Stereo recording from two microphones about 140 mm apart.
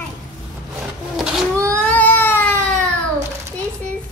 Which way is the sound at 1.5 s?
20° right (ahead or behind).